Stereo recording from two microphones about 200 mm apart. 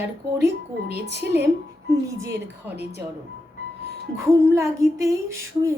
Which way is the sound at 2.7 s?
10° right (ahead or behind).